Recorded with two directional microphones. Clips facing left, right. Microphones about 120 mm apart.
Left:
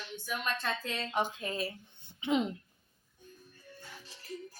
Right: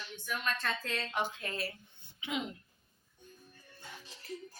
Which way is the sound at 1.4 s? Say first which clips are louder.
Left 3 dB; 15° left (ahead or behind).